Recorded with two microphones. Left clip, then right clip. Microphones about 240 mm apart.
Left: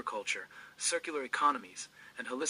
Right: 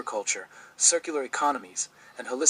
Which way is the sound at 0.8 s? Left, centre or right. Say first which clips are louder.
Right 9 dB; centre.